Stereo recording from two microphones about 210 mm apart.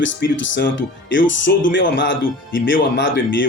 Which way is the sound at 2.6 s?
60° left (ahead or behind).